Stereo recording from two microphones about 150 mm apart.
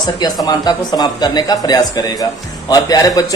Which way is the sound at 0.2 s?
25° left (ahead or behind).